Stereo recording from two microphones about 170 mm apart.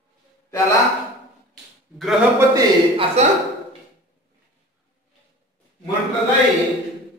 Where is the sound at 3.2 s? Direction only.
40° right (ahead or behind).